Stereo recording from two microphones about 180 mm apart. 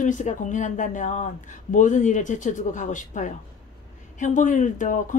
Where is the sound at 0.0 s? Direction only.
45° left (ahead or behind).